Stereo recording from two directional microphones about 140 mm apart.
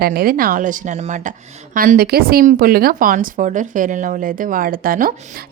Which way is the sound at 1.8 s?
90° right.